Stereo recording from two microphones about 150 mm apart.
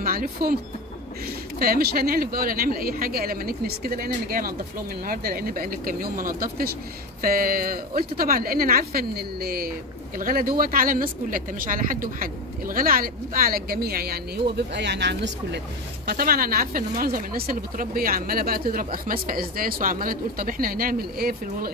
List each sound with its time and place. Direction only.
0.0 s speech: 75° right (ahead or behind)
1.6 s speech: 85° right
16.1 s speech: 85° right